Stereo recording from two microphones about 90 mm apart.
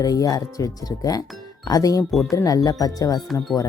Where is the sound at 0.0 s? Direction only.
45° left (ahead or behind).